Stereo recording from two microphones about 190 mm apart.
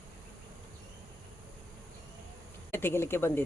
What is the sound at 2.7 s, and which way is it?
Speech, 10° left (ahead or behind).